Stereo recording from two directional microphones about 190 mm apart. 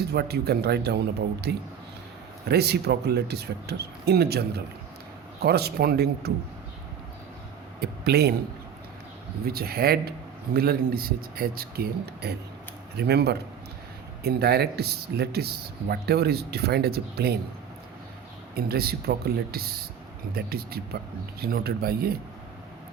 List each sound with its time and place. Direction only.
0.1 s speech: 55° right (ahead or behind)
7.8 s speech: 55° right (ahead or behind)
9.5 s speech: 55° right (ahead or behind)
18.5 s speech: 55° right (ahead or behind)